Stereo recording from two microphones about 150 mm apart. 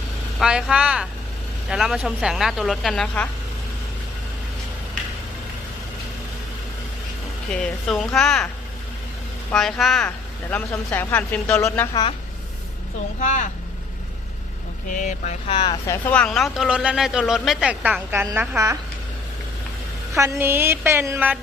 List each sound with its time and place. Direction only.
0.3 s speech: 5° right (ahead or behind)
7.5 s speech: 5° left (ahead or behind)
9.5 s speech: centre (ahead or behind)
10.5 s speech: 15° left (ahead or behind)
13.1 s speech: 55° left (ahead or behind)
14.9 s speech: 55° left (ahead or behind)
15.5 s speech: 30° left (ahead or behind)
15.9 s speech: 10° left (ahead or behind); by 18.3 s 10° right (ahead or behind)
18.3 s speech: 20° right (ahead or behind)
20.1 s a woman's voice: 15° right (ahead or behind)